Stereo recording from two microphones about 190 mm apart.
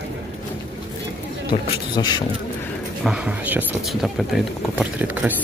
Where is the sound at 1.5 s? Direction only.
25° left (ahead or behind).